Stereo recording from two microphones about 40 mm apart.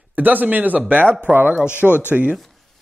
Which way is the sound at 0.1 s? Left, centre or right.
Right.